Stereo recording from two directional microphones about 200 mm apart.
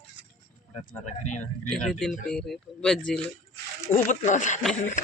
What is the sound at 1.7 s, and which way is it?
Speech, 5° left (ahead or behind).